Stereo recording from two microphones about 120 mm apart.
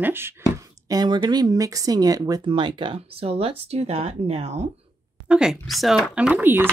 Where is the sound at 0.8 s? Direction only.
35° right (ahead or behind); by 4.7 s 60° right (ahead or behind).